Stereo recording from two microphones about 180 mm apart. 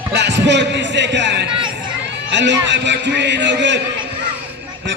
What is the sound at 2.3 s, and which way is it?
Run, 80° right.